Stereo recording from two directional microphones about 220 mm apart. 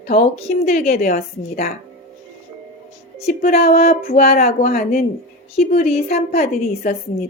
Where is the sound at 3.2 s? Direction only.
30° left (ahead or behind).